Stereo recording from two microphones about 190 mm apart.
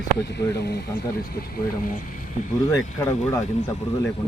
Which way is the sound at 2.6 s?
15° left (ahead or behind).